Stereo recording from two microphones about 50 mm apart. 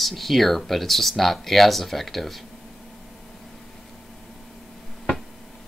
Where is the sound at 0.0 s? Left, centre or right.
Centre.